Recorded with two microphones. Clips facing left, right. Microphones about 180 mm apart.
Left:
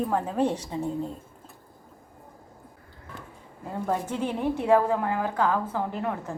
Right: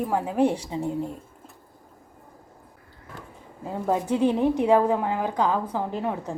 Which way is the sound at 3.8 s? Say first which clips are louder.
Right 6 dB; 15° right (ahead or behind).